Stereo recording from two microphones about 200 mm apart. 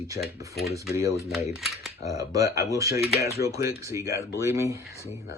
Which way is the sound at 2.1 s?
15° right (ahead or behind).